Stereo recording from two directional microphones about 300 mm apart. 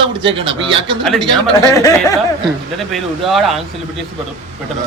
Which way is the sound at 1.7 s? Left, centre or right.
Centre.